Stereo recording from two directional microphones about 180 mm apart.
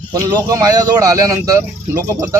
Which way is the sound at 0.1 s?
20° right (ahead or behind).